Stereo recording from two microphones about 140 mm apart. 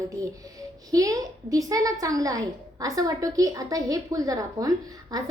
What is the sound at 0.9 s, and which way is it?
A woman's voice, 25° right (ahead or behind).